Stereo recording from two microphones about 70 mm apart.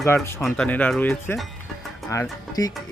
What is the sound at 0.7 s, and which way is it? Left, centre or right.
Speech, left.